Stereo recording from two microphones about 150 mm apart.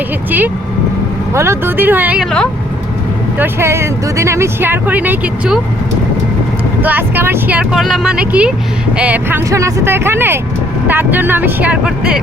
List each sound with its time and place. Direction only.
0.3 s speech: 10° right (ahead or behind)
3.3 s speech: 15° right (ahead or behind)
6.8 s speech: 15° right (ahead or behind)